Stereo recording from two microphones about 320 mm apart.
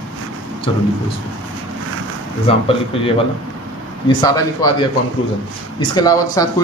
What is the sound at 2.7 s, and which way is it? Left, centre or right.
Speech, centre.